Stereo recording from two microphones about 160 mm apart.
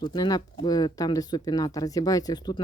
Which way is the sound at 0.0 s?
25° left (ahead or behind).